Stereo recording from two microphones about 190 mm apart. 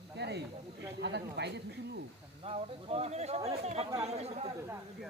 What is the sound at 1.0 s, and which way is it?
Speech, 65° right (ahead or behind).